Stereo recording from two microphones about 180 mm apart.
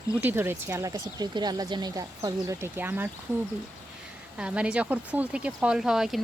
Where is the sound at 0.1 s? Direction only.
10° right (ahead or behind).